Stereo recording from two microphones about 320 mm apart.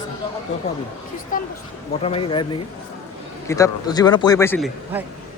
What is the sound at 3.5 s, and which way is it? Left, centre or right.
A man's voice, centre.